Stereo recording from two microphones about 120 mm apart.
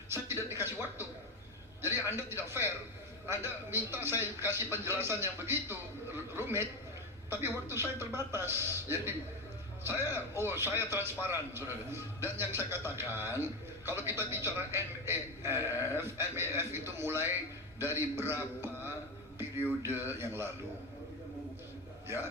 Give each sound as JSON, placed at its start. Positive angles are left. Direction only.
{"t": 0.1, "sound": "a man's voice", "side_deg": -20}
{"t": 22.0, "sound": "a man's voice", "side_deg": -20}